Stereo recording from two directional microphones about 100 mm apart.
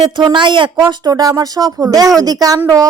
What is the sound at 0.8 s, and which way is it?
Speech, 40° right (ahead or behind).